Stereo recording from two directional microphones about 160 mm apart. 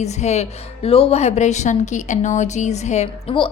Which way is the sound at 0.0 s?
45° left (ahead or behind).